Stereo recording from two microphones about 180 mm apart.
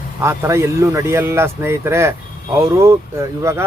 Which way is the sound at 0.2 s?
15° right (ahead or behind).